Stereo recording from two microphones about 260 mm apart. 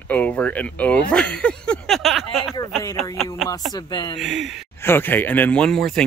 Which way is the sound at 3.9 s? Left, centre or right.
Centre.